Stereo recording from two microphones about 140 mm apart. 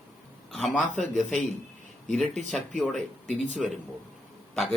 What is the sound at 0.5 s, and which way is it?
Speech, 5° left (ahead or behind).